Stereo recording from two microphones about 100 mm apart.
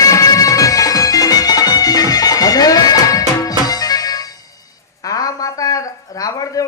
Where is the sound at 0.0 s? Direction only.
35° left (ahead or behind).